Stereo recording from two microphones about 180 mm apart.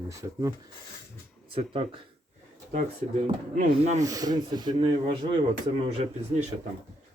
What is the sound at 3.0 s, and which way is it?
Speech, 35° right (ahead or behind).